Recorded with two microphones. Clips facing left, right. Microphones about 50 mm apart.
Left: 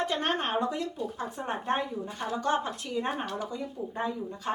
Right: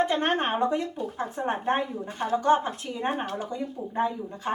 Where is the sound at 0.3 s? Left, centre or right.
Centre.